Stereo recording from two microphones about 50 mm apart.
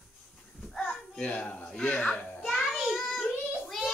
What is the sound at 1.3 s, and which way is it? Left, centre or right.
Speech, left.